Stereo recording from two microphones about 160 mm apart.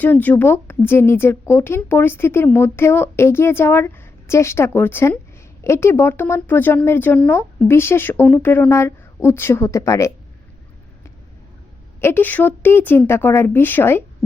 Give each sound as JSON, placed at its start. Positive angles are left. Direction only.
{"t": 0.0, "sound": "a woman's voice", "side_deg": 10}
{"t": 11.9, "sound": "a woman's voice", "side_deg": 15}